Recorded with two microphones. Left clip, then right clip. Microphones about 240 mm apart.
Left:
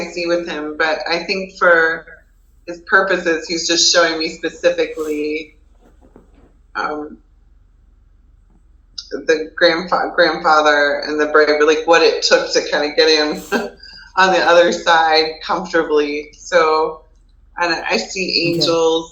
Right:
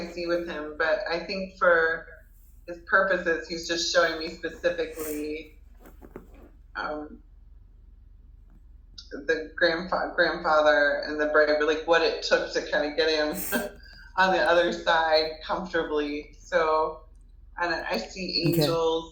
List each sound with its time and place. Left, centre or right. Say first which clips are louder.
0.0 s speech: left 10 dB; left
9.6 s speech: left 10 dB; left